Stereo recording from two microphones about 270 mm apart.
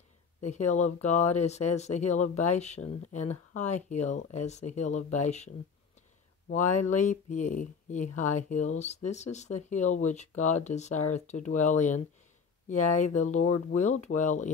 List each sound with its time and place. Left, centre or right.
0.4 s speech: left
6.5 s speech: left